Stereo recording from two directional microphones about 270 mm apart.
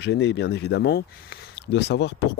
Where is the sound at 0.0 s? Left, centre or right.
Left.